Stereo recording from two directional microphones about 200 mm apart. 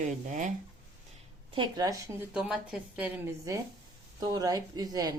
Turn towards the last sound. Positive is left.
turn(degrees=-20)  # may be behind; listen again after turning